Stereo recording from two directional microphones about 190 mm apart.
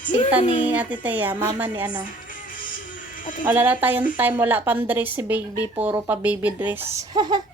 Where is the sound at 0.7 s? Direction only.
10° right (ahead or behind).